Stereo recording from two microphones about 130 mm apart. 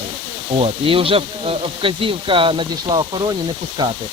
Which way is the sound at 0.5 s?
45° right (ahead or behind).